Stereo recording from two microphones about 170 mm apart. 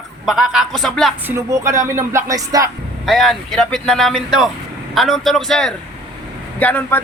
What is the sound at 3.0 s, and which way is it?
A man's voice, centre (ahead or behind).